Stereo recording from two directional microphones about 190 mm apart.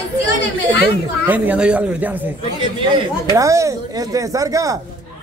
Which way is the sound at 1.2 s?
10° right (ahead or behind).